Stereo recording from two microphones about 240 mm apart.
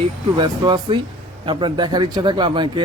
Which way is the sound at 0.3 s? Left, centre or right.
Centre.